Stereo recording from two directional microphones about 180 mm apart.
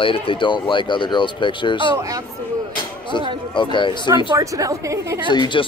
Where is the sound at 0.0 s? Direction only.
30° left (ahead or behind).